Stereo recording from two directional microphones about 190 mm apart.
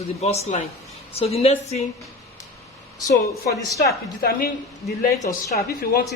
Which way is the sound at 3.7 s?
55° left (ahead or behind).